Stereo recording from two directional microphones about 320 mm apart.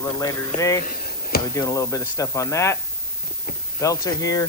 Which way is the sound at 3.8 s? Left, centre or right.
Centre.